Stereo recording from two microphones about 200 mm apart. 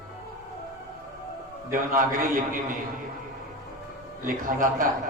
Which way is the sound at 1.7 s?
45° right (ahead or behind).